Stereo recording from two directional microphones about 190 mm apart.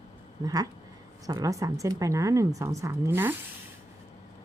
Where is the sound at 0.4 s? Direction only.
20° right (ahead or behind).